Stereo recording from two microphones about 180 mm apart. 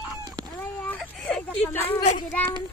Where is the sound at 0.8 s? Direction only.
5° left (ahead or behind).